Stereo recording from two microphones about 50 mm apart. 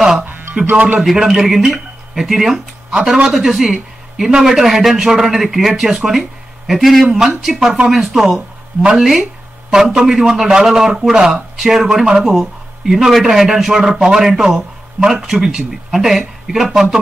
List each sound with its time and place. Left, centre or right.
0.2 s music: right
0.7 s speech: right
1.1 s speech: centre